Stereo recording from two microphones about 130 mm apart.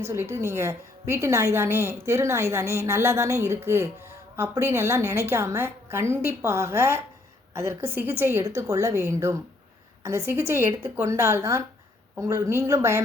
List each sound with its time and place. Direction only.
0.0 s a woman's voice: 20° right (ahead or behind)